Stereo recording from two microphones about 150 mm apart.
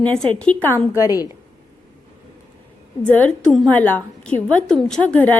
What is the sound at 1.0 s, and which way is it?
Speech, 25° left (ahead or behind).